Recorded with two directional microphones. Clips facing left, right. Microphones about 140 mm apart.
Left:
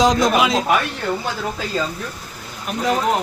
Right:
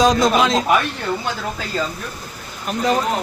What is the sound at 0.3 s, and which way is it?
Speech, 5° left (ahead or behind).